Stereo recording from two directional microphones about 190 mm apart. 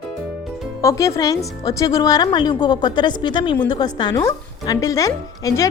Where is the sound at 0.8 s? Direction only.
15° left (ahead or behind).